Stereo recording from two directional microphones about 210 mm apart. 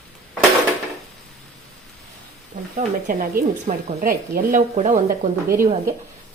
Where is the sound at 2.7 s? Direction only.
35° right (ahead or behind).